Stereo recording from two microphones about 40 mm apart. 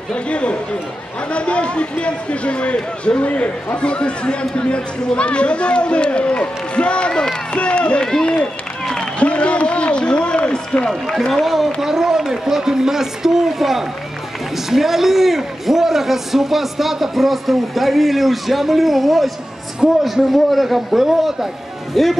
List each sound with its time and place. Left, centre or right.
0.1 s speech: left
8.0 s speech: centre
9.0 s a man's voice: left
11.4 s a man's voice: centre